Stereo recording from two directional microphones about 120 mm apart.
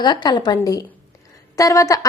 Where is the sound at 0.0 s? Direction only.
35° left (ahead or behind).